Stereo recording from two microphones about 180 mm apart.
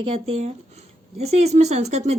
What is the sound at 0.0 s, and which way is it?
Speech, 35° right (ahead or behind).